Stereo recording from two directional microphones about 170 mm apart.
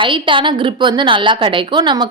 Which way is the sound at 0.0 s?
30° right (ahead or behind).